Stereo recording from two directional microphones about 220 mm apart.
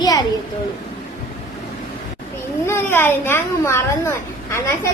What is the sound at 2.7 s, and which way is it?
A woman's voice, 10° left (ahead or behind).